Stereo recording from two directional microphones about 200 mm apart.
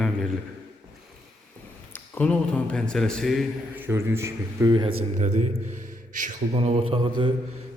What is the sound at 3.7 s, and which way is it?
Speech, 10° right (ahead or behind).